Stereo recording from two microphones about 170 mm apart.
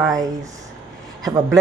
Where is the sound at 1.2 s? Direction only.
20° right (ahead or behind).